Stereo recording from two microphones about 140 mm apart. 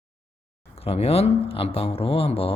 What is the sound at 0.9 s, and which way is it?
Speech, 45° left (ahead or behind).